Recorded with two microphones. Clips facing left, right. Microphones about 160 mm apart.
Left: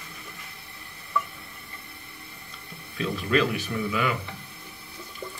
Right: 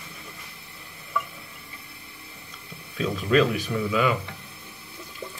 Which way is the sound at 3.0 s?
15° right (ahead or behind).